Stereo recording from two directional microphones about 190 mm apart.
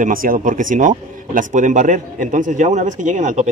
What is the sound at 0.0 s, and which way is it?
Speech, 45° right (ahead or behind).